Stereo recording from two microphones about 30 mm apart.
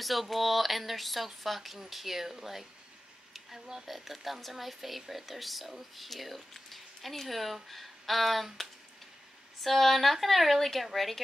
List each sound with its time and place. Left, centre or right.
0.0 s speech: centre
3.3 s a sound: centre
3.8 s speech: centre
9.6 s speech: centre